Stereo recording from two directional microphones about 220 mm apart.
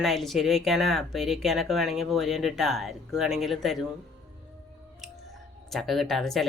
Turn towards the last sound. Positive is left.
turn(degrees=0)  # may be behind; listen again after turning